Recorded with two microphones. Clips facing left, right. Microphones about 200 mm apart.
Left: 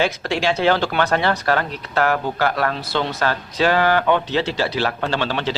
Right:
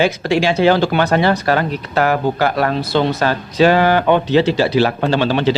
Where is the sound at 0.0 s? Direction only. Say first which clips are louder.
Right 5 dB; 5° right (ahead or behind).